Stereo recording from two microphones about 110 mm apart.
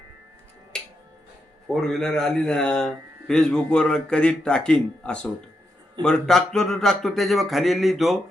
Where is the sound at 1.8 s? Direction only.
5° left (ahead or behind).